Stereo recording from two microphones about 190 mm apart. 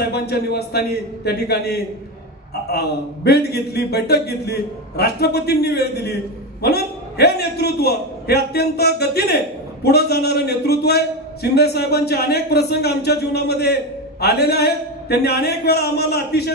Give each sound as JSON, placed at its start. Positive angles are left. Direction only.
{"t": 0.0, "sound": "speech", "side_deg": 55}